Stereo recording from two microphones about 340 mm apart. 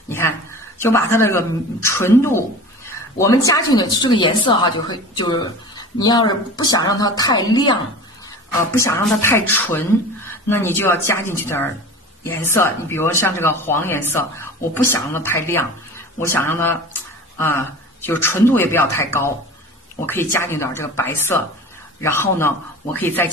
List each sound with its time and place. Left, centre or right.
0.1 s a woman's voice: centre
20.1 s a woman's voice: centre